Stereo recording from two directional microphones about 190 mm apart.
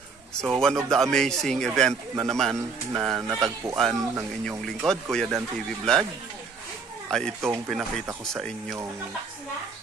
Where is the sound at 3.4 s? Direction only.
15° right (ahead or behind).